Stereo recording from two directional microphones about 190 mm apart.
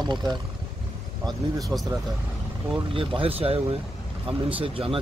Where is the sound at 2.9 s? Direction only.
30° right (ahead or behind).